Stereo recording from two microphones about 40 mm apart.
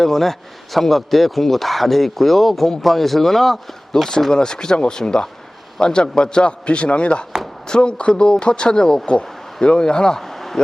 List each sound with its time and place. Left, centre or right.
0.0 s speech: centre
4.3 s a man's voice: centre
10.2 s a sound: centre